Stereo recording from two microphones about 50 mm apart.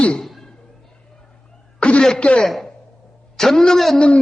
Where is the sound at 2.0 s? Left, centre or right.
Centre.